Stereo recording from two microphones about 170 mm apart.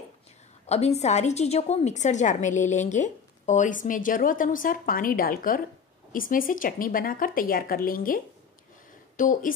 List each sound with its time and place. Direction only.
0.7 s a woman's voice: 40° left (ahead or behind)